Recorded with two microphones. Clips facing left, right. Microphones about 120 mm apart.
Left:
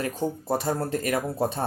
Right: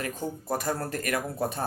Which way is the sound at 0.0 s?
30° left (ahead or behind).